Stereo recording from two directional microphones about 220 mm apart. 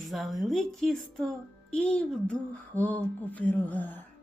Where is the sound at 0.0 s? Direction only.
Centre (ahead or behind).